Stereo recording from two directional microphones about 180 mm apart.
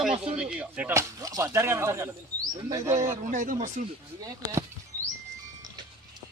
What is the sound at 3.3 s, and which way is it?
Speech, 45° right (ahead or behind).